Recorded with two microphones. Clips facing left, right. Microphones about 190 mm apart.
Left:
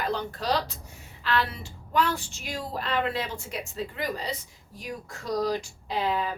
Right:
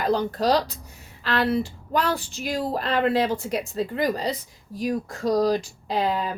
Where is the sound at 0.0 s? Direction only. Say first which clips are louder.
Right 7 dB; 40° right (ahead or behind).